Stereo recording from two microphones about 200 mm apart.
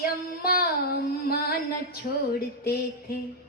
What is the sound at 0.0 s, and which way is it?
Singing, 50° left (ahead or behind).